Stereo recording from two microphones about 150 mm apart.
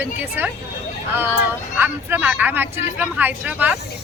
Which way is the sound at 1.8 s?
10° right (ahead or behind).